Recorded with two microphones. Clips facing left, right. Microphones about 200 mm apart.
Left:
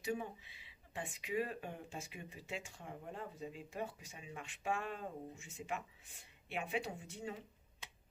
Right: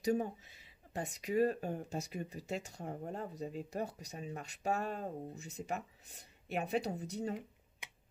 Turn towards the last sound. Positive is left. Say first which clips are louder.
# right 1 dB
turn(degrees=-15)  # may be behind; listen again after turning